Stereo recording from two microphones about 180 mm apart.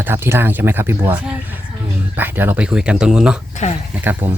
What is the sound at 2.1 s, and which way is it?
Speech, 10° right (ahead or behind).